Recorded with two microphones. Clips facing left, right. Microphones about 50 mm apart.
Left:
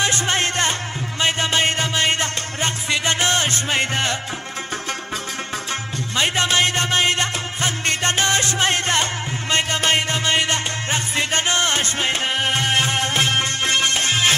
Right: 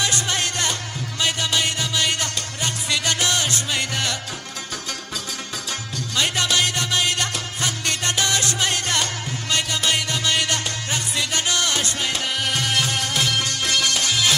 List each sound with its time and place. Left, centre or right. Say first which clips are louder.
0.0 s music: left 3 dB; left
6.1 s music: left 3 dB; left